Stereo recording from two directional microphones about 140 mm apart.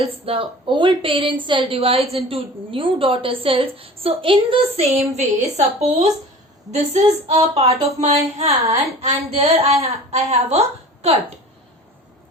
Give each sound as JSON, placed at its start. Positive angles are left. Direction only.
{"t": 0.0, "sound": "a woman's voice", "side_deg": -40}